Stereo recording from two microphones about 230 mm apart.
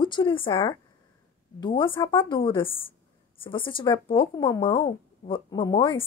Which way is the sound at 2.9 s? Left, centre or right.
Left.